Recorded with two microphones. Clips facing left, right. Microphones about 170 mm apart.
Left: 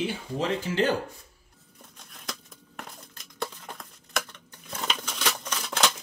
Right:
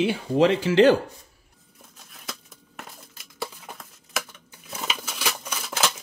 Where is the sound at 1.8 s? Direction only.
Centre (ahead or behind).